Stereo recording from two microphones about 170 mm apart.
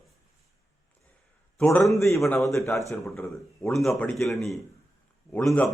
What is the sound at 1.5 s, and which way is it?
A man's voice, 5° left (ahead or behind).